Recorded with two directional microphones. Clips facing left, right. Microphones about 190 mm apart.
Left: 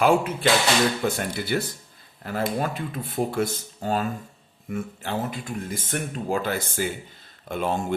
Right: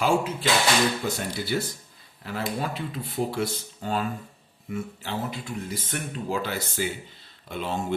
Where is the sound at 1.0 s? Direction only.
55° left (ahead or behind).